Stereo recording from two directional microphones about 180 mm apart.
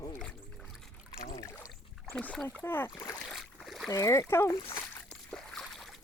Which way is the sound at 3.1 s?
Centre (ahead or behind).